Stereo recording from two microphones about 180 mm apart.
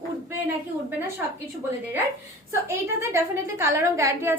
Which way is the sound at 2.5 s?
15° right (ahead or behind).